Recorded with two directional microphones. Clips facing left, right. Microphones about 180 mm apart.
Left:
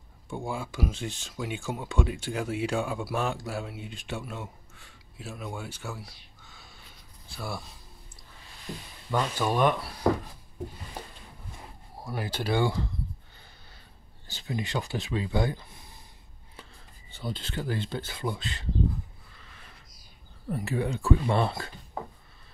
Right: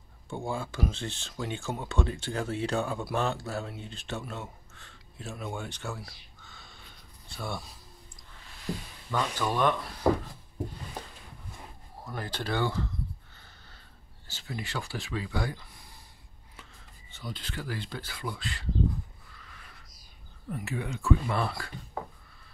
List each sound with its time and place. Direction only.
0.5 s speech: 10° left (ahead or behind)
9.1 s speech: 15° left (ahead or behind)
11.0 s a sound: 10° left (ahead or behind)
12.0 s speech: 10° left (ahead or behind)
14.2 s speech: 20° left (ahead or behind)
17.1 s speech: 30° left (ahead or behind)
20.4 s speech: 35° left (ahead or behind)